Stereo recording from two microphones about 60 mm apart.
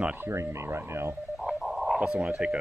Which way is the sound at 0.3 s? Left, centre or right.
Right.